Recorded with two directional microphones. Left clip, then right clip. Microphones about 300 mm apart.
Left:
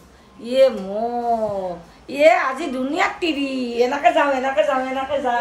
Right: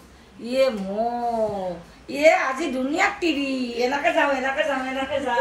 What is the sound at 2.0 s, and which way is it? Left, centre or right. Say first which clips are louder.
Speech: left 3 dB; centre.